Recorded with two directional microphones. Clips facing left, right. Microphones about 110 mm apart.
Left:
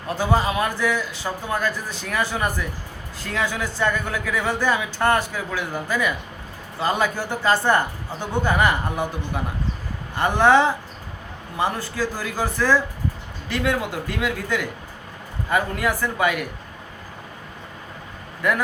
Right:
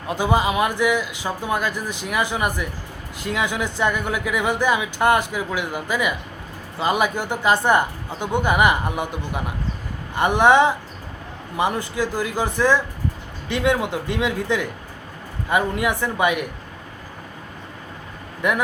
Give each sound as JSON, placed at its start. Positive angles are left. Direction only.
{"t": 0.1, "sound": "speech", "side_deg": -15}
{"t": 18.4, "sound": "speech", "side_deg": -20}